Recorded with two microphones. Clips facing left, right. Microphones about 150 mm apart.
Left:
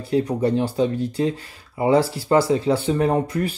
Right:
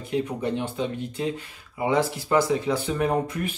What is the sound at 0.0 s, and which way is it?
Speech, 35° left (ahead or behind).